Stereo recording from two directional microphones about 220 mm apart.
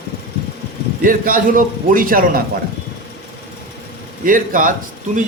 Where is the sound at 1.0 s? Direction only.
40° right (ahead or behind).